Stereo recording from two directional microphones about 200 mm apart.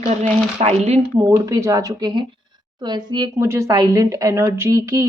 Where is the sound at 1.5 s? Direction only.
15° right (ahead or behind).